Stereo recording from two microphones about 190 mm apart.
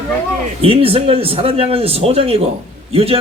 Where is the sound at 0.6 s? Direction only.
30° right (ahead or behind).